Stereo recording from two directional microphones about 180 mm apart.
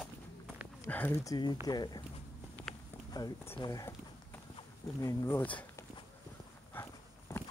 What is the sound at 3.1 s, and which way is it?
Speech, 20° left (ahead or behind).